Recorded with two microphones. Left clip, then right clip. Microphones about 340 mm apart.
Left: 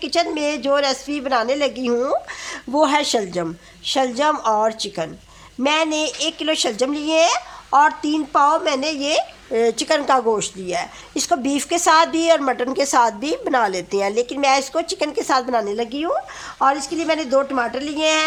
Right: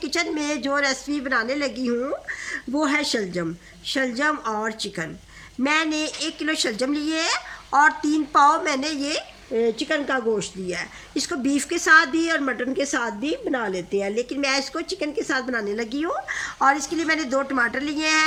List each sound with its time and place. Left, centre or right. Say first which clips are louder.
0.0 s a woman's voice: left 5 dB; centre